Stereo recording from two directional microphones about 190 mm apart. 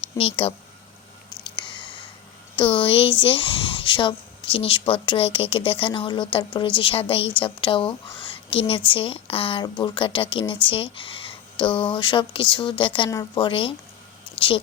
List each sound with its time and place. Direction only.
0.2 s speech: 30° left (ahead or behind)
1.3 s a sound: 25° left (ahead or behind)
2.6 s speech: 25° left (ahead or behind)